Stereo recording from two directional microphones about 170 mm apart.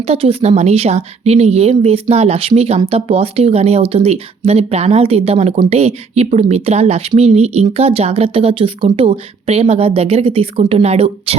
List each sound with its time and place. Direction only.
0.0 s speech: 35° right (ahead or behind)